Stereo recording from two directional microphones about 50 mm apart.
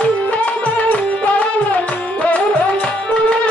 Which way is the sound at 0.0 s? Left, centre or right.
Left.